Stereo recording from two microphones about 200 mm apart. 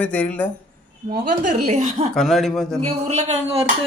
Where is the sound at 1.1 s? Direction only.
40° right (ahead or behind).